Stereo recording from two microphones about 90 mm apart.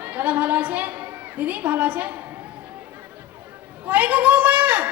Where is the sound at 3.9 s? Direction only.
20° right (ahead or behind).